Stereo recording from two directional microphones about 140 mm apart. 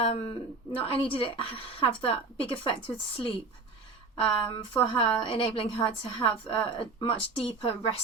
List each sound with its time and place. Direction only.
0.0 s a woman's voice: 45° left (ahead or behind)